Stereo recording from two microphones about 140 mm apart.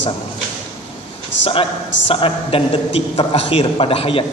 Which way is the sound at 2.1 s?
45° left (ahead or behind).